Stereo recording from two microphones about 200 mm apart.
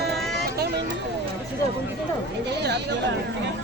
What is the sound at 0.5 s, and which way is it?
Vehicle, 55° right (ahead or behind).